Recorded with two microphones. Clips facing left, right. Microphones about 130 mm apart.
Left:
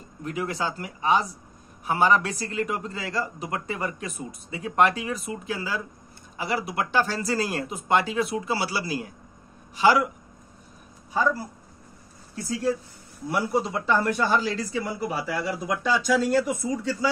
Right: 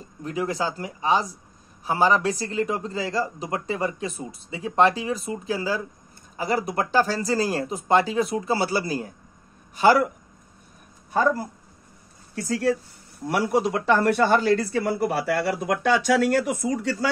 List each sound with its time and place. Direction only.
0.2 s speech: 35° right (ahead or behind)
11.1 s speech: 50° right (ahead or behind)
12.4 s speech: 70° right (ahead or behind)